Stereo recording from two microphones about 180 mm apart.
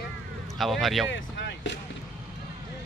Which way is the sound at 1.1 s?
85° left.